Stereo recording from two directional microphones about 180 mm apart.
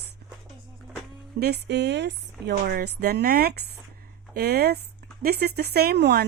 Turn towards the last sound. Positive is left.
turn(degrees=-65)  # may be behind; listen again after turning